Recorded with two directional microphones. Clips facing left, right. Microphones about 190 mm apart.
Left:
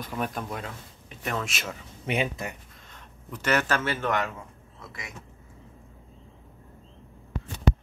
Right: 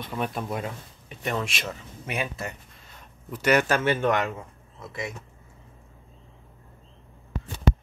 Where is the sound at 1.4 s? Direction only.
Centre (ahead or behind).